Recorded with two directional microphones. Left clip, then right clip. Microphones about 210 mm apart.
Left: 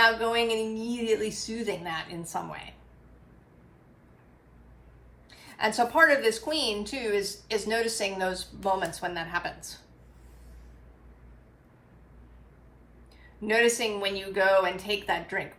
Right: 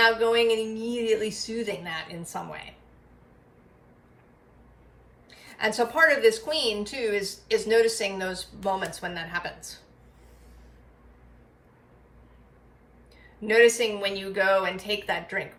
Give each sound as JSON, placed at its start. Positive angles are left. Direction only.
{"t": 0.0, "sound": "a woman's voice", "side_deg": 15}
{"t": 5.3, "sound": "a woman's voice", "side_deg": 20}
{"t": 13.4, "sound": "a woman's voice", "side_deg": 15}